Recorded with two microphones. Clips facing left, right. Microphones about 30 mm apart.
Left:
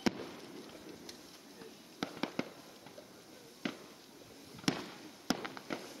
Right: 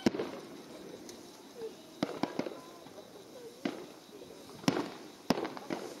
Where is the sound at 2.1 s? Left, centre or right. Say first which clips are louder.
Right 1 dB; centre.